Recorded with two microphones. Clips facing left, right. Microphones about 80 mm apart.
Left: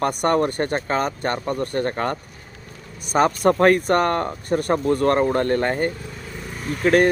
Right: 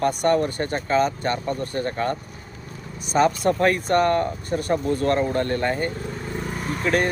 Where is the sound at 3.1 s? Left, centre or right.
Left.